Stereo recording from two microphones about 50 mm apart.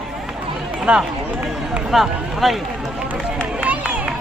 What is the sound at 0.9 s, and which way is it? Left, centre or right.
Speech, right.